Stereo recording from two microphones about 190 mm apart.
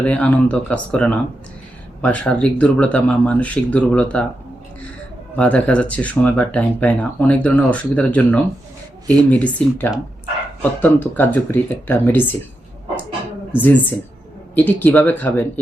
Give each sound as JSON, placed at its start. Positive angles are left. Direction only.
{"t": 0.0, "sound": "speech", "side_deg": 5}
{"t": 5.4, "sound": "speech", "side_deg": 5}
{"t": 14.5, "sound": "speech", "side_deg": 10}